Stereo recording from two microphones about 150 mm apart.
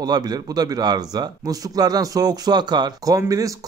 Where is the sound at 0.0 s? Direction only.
25° right (ahead or behind).